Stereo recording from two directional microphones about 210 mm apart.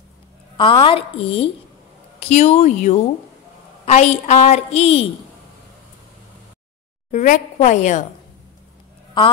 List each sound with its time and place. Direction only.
0.6 s a woman's voice: 25° left (ahead or behind)
7.1 s a woman's voice: 35° left (ahead or behind)